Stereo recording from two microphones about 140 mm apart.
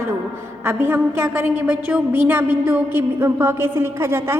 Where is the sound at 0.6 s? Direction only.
15° right (ahead or behind).